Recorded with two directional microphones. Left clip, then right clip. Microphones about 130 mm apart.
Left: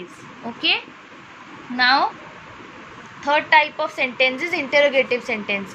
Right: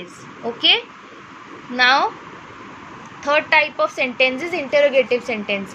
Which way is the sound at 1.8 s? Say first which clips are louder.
Right 2 dB; 25° right (ahead or behind).